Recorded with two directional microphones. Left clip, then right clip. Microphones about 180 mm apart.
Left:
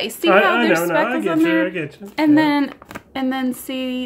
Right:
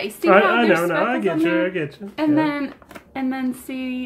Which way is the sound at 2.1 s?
40° left (ahead or behind).